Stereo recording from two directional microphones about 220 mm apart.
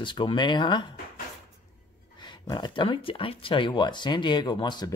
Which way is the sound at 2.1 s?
20° left (ahead or behind).